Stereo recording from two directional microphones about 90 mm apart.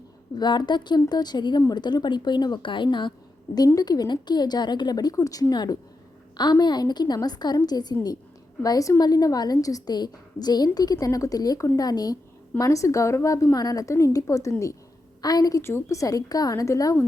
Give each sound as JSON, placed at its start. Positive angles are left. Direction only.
{"t": 0.3, "sound": "a woman's voice", "side_deg": 55}
{"t": 3.8, "sound": "a woman's voice", "side_deg": 45}
{"t": 15.6, "sound": "a woman's voice", "side_deg": 30}